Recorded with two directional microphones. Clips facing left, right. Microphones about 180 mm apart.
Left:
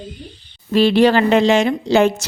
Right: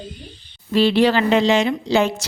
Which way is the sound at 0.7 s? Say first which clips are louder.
Left 3 dB; 50° left (ahead or behind).